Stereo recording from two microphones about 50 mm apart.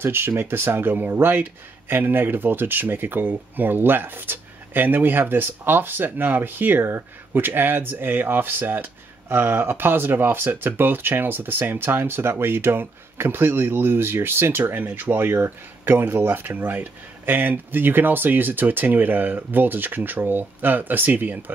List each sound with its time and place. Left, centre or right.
0.0 s speech: right